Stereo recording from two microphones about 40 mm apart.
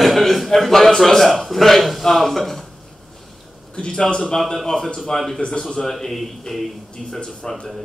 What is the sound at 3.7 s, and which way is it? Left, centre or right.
Speech, left.